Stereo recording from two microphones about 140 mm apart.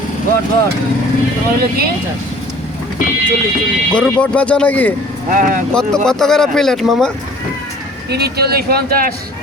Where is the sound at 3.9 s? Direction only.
10° left (ahead or behind).